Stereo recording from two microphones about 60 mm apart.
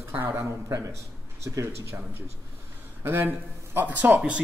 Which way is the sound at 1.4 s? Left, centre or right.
Right.